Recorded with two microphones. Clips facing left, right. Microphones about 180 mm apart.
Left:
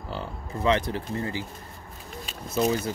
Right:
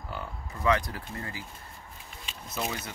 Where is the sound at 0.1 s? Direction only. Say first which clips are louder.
Left 5 dB; 25° left (ahead or behind).